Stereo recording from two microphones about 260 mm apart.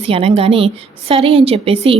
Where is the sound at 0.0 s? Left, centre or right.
Right.